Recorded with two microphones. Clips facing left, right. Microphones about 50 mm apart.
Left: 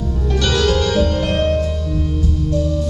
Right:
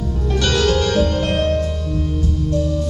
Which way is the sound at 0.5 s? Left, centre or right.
Centre.